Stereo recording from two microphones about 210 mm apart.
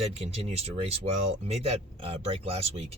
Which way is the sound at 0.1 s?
30° right (ahead or behind).